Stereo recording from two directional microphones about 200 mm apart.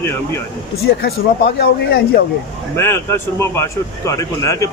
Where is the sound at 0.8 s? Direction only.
55° left (ahead or behind).